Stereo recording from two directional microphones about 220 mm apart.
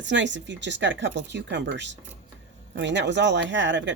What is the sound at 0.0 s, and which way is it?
Speech, 55° right (ahead or behind).